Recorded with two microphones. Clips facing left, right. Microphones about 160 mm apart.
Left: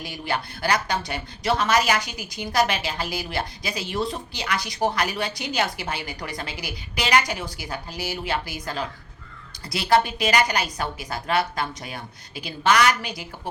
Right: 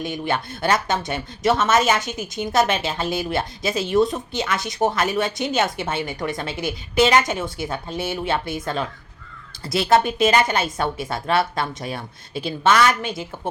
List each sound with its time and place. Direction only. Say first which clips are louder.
0.0 s speech: right 4 dB; 20° right (ahead or behind)